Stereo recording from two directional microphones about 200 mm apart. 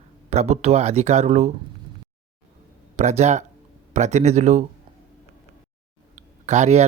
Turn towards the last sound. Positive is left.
turn(degrees=-35)  # may be behind; listen again after turning